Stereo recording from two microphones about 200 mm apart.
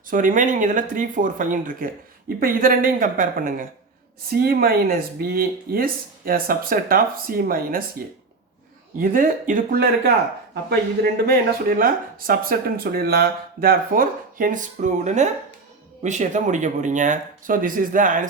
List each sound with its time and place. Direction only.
0.1 s speech: 40° right (ahead or behind)
9.0 s speech: 45° right (ahead or behind)